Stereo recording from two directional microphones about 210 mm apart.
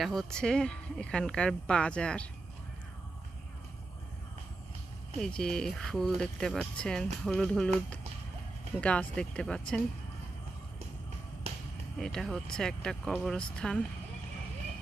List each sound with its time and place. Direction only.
0.0 s speech: centre (ahead or behind)
5.2 s speech: 5° left (ahead or behind)
8.8 s speech: 5° left (ahead or behind)
11.5 s a sound: 30° right (ahead or behind)
11.9 s speech: centre (ahead or behind)